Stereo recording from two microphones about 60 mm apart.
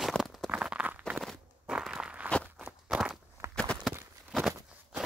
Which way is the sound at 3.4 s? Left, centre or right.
Right.